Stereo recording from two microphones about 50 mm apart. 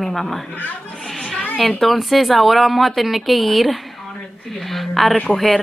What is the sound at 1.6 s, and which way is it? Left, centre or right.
Speech, centre.